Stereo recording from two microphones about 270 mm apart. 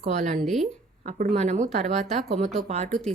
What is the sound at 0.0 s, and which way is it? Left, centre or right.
Speech, right.